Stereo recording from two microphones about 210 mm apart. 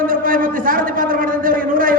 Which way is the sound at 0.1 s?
40° right (ahead or behind).